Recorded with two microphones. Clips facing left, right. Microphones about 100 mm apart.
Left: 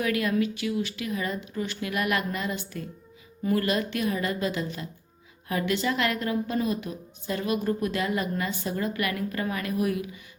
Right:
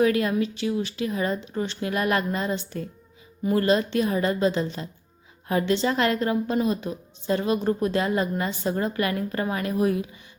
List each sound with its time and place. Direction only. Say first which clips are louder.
0.0 s a woman's voice: right 4 dB; 30° right (ahead or behind)